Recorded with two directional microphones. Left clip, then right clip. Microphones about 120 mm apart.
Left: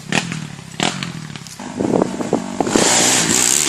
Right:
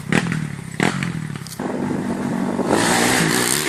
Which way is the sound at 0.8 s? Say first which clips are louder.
Left 1 dB; 45° left (ahead or behind).